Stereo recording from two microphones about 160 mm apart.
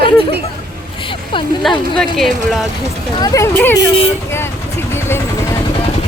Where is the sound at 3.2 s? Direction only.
20° left (ahead or behind).